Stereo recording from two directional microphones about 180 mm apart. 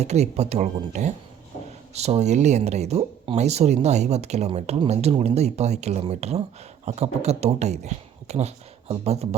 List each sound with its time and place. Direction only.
0.0 s speech: 40° right (ahead or behind)